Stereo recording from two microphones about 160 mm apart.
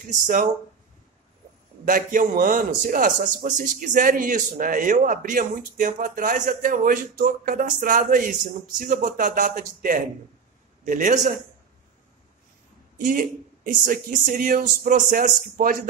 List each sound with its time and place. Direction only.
0.0 s a man's voice: 55° right (ahead or behind)
1.9 s a man's voice: 55° right (ahead or behind)
13.0 s a man's voice: 55° right (ahead or behind)